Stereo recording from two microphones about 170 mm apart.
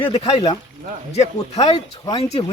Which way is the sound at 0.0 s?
35° left (ahead or behind).